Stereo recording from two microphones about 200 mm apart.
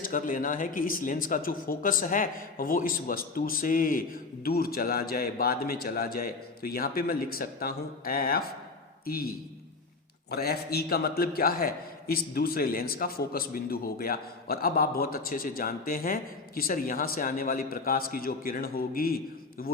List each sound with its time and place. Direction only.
0.0 s a man's voice: 40° left (ahead or behind)